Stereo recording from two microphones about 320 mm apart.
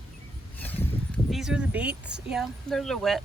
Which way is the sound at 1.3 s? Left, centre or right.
Centre.